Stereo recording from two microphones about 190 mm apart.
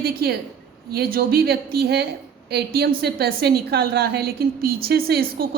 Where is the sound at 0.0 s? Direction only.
55° right (ahead or behind).